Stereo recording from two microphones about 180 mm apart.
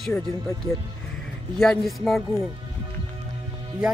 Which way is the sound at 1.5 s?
Centre (ahead or behind).